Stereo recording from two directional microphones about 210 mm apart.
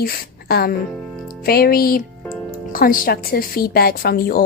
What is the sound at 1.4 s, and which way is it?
A woman's voice, 45° left (ahead or behind).